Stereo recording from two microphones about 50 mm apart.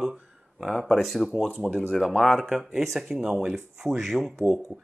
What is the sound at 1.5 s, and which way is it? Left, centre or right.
Speech, right.